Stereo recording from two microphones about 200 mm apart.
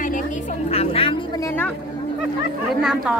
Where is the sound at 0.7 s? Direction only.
30° left (ahead or behind); by 1.7 s 10° left (ahead or behind).